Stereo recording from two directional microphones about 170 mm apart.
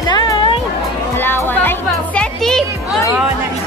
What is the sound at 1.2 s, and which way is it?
Music, 10° left (ahead or behind).